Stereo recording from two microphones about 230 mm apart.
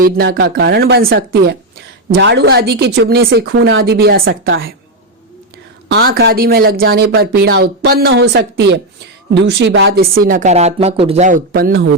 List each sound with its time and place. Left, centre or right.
0.0 s a woman's voice: right
5.9 s a woman's voice: right